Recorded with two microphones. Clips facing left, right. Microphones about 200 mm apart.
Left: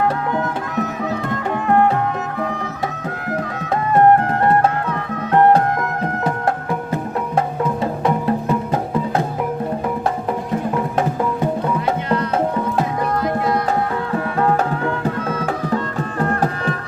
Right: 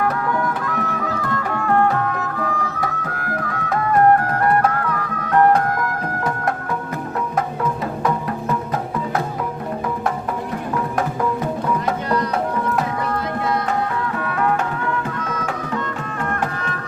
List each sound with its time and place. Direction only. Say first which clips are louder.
0.0 s music: left 1 dB; 20° left (ahead or behind)
8.0 s music: left 4 dB; 30° left (ahead or behind)
14.3 s music: left 3 dB; 30° left (ahead or behind)